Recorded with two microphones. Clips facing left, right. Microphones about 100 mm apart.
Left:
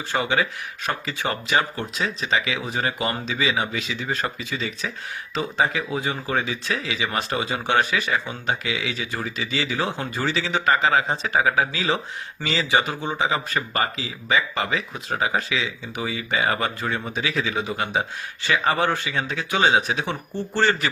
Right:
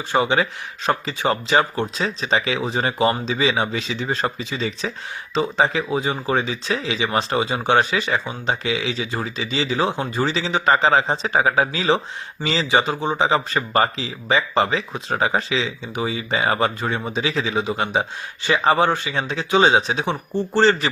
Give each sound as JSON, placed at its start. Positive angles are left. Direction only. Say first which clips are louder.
{"t": 0.1, "sound": "speech", "louder": "right 4 dB", "side_deg": -25}